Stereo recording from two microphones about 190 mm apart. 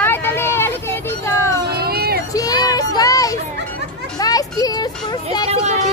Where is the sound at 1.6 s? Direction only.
55° right (ahead or behind).